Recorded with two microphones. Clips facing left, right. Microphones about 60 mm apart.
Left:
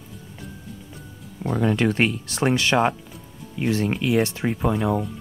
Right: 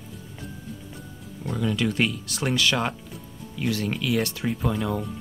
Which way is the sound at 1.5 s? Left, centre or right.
Left.